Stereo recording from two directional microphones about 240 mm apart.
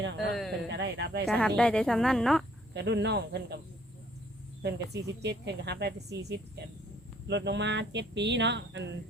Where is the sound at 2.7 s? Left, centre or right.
Right.